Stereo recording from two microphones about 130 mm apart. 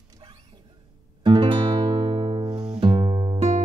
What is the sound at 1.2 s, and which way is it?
Music, 35° right (ahead or behind).